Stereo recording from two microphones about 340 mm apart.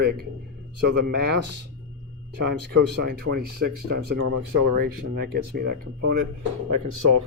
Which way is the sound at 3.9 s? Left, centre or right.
Right.